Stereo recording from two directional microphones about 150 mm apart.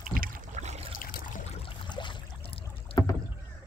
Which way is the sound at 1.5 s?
35° left (ahead or behind).